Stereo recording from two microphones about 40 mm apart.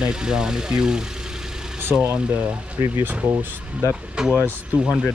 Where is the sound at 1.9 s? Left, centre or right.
Right.